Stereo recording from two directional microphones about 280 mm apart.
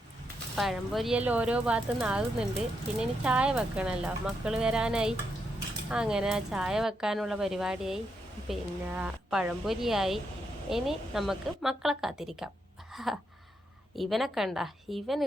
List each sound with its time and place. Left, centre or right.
0.5 s speech: centre